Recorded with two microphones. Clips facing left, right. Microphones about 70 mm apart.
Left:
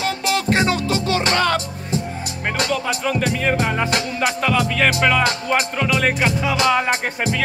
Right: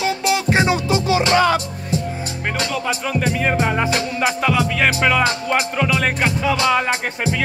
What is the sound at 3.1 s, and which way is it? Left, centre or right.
Music, centre.